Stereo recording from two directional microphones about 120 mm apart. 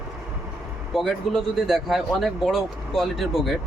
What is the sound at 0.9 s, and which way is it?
Speech, centre (ahead or behind).